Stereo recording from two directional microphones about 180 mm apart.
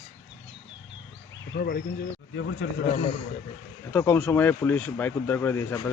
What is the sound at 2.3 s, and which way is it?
Speech, 90° left.